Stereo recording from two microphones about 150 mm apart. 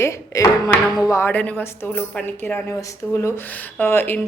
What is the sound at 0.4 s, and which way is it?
A woman's voice, 20° left (ahead or behind).